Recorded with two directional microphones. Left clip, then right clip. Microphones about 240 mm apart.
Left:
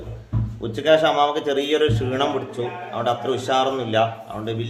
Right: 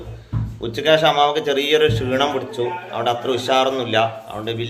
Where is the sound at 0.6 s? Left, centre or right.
Centre.